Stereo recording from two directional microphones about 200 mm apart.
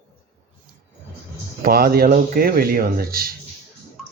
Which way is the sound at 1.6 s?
50° right (ahead or behind).